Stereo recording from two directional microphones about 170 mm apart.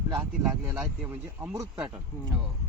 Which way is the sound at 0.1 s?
10° right (ahead or behind).